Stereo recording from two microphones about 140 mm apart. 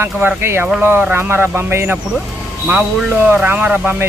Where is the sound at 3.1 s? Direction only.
15° right (ahead or behind).